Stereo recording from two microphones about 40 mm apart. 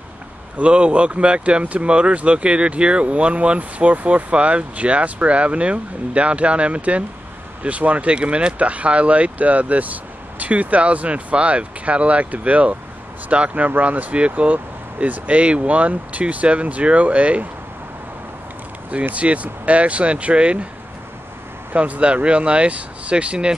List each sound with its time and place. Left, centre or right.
0.6 s speech: right
13.7 s speech: right
19.1 s speech: right
21.7 s speech: right